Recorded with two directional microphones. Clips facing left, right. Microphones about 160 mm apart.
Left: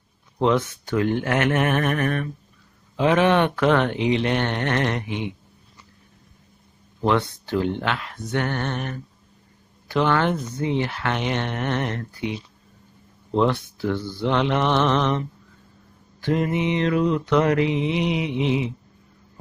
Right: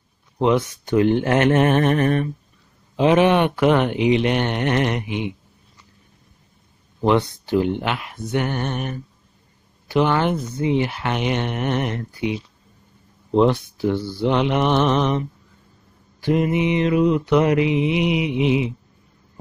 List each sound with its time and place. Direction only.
0.4 s speech: 15° right (ahead or behind)
7.0 s speech: 15° right (ahead or behind)